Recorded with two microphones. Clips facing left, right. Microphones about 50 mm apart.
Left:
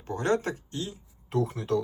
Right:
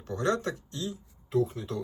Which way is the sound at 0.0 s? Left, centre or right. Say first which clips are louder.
Left 2 dB; left.